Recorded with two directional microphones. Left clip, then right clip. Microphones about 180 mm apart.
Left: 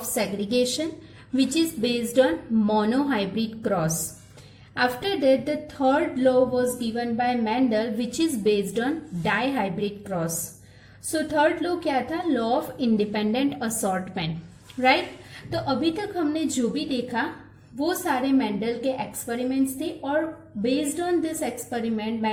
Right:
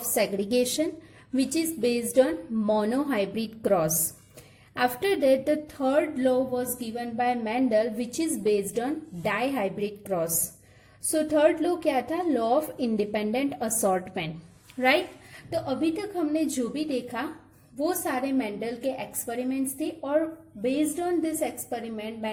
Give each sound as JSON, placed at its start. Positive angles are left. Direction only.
{"t": 0.0, "sound": "a woman's voice", "side_deg": -40}
{"t": 14.8, "sound": "a woman's voice", "side_deg": -50}